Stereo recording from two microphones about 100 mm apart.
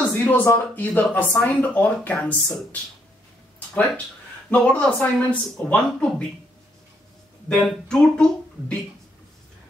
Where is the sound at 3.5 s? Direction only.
15° left (ahead or behind).